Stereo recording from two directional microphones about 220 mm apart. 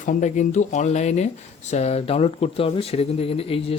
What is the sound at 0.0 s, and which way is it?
Speech, 35° left (ahead or behind).